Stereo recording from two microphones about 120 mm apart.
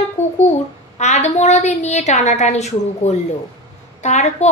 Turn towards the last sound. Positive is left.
turn(degrees=75)  # may be behind; listen again after turning